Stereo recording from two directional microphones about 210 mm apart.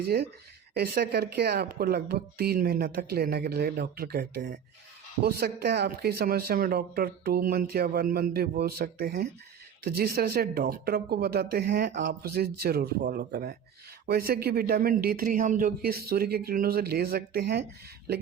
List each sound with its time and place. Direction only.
0.0 s speech: 50° right (ahead or behind)